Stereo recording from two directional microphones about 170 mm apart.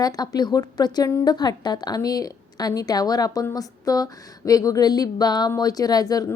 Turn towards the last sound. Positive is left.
turn(degrees=20)  # may be behind; listen again after turning